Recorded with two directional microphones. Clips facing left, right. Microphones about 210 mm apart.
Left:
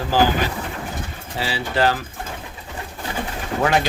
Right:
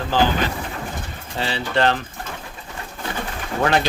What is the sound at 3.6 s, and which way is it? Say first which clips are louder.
Speech: even; 5° left (ahead or behind).